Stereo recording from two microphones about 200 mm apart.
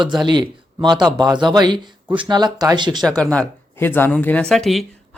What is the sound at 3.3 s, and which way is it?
Speech, 10° left (ahead or behind).